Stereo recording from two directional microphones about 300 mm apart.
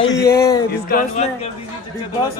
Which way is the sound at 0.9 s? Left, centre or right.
Left.